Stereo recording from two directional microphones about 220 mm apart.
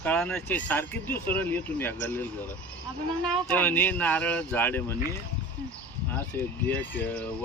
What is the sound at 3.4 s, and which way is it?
Speech, 10° left (ahead or behind).